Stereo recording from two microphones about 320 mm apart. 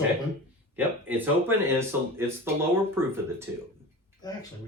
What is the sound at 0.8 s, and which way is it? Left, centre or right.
Speech, centre.